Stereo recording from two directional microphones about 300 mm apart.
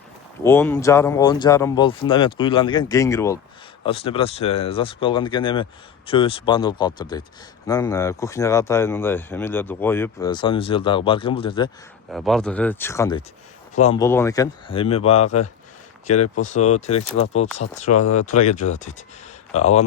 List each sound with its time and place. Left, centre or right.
0.4 s speech: centre
12.1 s speech: centre; by 14.0 s left
14.0 s speech: centre
16.1 s speech: left
16.4 s speech: left